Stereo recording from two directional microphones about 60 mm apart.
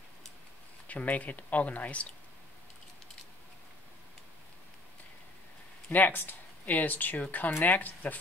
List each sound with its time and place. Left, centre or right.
0.8 s speech: left
5.9 s speech: left